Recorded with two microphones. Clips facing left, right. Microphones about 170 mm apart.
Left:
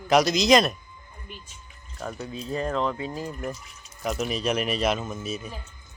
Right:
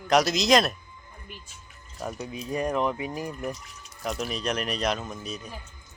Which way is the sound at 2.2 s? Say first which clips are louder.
Even; 15° right (ahead or behind).